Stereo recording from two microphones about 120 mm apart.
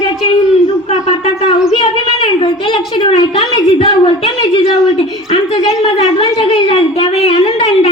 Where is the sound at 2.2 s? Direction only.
45° left (ahead or behind).